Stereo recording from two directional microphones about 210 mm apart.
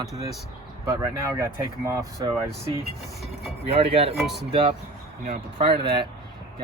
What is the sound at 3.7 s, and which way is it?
Speech, 25° right (ahead or behind).